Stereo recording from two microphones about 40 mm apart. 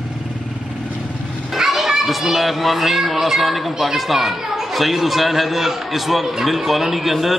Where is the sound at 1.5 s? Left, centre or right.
Centre.